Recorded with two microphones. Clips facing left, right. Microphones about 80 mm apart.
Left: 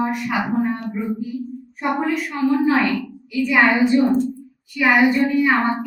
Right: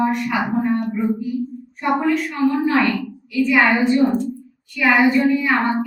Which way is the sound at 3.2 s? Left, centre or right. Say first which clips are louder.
Right 1 dB; centre.